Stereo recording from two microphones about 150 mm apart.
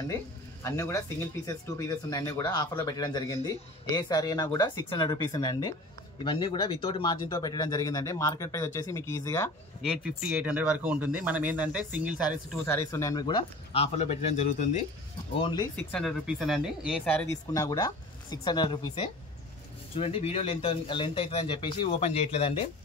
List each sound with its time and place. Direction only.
0.1 s a man's voice: 20° left (ahead or behind)
9.8 s speech: 5° right (ahead or behind)
12.6 s speech: 20° left (ahead or behind); by 14.9 s 50° left (ahead or behind)
15.4 s speech: 25° left (ahead or behind)
15.7 s speech: 5° left (ahead or behind)
17.1 s speech: 10° left (ahead or behind)
17.6 s speech: 25° left (ahead or behind)
20.0 s a man's voice: 40° left (ahead or behind)